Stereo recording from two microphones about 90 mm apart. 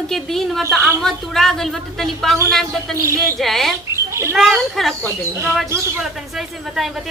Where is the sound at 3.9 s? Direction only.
30° right (ahead or behind).